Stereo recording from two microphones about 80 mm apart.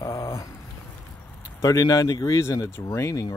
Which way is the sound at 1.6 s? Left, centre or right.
Left.